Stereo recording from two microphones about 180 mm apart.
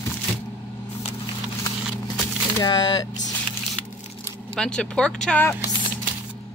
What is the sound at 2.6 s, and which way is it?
Speech, 20° left (ahead or behind).